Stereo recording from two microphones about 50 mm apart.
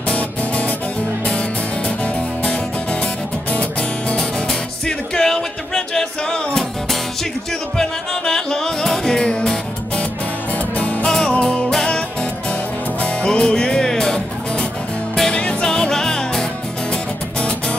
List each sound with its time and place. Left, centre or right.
0.1 s music: left
2.4 s music: left
4.2 s music: centre; by 11.1 s left
11.1 s music: centre
13.0 s music: centre